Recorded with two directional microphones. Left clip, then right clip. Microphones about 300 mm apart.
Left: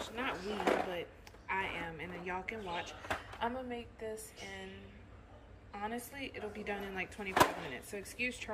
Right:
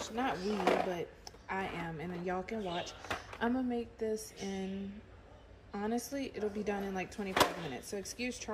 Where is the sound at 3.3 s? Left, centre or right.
Right.